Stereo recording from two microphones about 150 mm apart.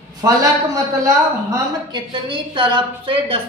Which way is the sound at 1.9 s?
30° right (ahead or behind).